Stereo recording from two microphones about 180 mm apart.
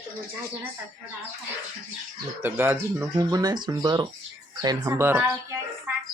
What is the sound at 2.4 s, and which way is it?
Speech, 10° right (ahead or behind).